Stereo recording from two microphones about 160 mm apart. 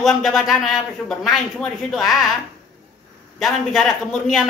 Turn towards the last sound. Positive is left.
turn(degrees=0)  # may be behind; listen again after turning